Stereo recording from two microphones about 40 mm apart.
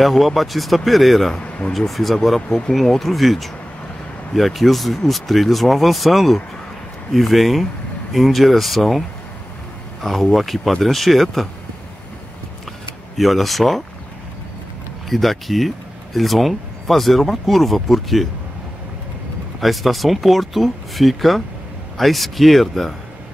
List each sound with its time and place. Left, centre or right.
0.0 s speech: centre
1.4 s speech: left
1.7 s speech: centre
10.0 s speech: centre
13.2 s speech: centre
15.0 s speech: centre
19.6 s speech: centre